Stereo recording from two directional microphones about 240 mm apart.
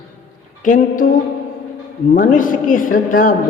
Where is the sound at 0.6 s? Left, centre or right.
Left.